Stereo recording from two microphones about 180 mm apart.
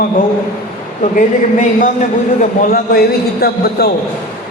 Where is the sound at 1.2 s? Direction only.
45° left (ahead or behind).